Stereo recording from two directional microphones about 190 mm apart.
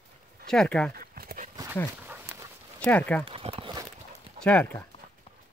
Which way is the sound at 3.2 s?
30° right (ahead or behind).